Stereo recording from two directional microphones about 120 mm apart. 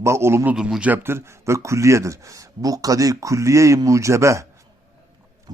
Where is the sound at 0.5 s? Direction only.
5° right (ahead or behind); by 4.5 s 25° right (ahead or behind).